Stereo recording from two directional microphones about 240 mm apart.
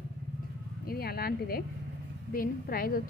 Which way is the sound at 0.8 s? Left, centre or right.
Left.